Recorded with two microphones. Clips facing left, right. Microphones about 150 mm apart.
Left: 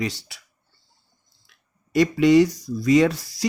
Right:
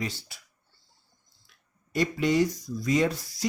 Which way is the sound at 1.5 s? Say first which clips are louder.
Left 9 dB; 85° left.